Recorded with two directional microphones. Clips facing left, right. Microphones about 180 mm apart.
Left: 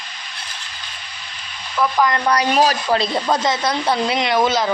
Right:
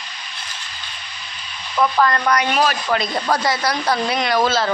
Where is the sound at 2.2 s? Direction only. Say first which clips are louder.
Left 2 dB; 35° left (ahead or behind).